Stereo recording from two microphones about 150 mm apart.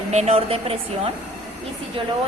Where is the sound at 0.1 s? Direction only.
45° right (ahead or behind).